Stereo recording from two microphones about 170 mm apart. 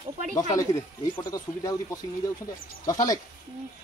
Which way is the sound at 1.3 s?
20° left (ahead or behind).